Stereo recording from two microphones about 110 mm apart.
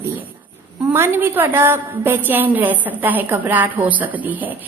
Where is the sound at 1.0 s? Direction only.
20° right (ahead or behind).